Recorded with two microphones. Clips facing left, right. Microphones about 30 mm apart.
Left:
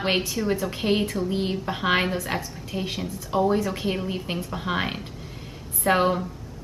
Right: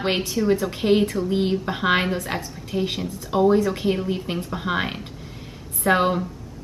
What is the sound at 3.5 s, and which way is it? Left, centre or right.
A woman's voice, centre.